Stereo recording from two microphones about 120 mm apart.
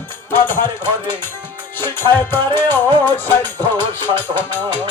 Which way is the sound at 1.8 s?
20° left (ahead or behind).